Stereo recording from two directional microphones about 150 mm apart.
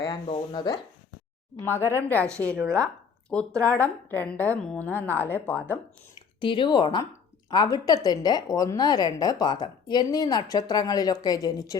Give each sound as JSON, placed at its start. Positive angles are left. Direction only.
{"t": 0.0, "sound": "speech", "side_deg": 30}
{"t": 1.6, "sound": "a woman's voice", "side_deg": 15}
{"t": 6.4, "sound": "a woman's voice", "side_deg": 35}